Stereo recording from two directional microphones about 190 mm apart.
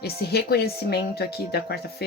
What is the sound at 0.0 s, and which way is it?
Speech, 55° left (ahead or behind).